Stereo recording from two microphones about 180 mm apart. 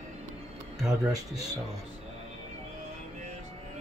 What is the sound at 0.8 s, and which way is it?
Speech, 5° right (ahead or behind).